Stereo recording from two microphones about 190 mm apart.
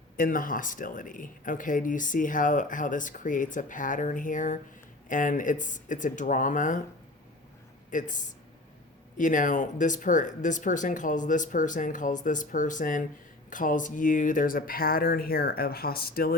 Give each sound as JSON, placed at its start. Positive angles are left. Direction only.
{"t": 0.2, "sound": "speech", "side_deg": 45}
{"t": 7.9, "sound": "speech", "side_deg": 40}